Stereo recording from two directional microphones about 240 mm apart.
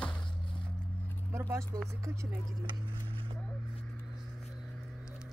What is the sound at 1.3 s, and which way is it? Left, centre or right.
Speech, centre.